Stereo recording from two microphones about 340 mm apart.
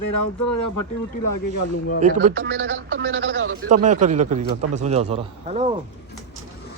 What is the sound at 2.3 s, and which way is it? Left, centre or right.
Speech, right.